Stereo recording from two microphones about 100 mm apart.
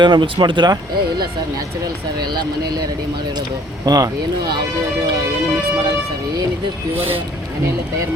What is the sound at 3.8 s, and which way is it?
Speech, 35° right (ahead or behind).